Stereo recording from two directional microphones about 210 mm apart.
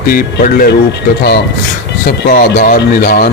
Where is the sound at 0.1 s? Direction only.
40° left (ahead or behind).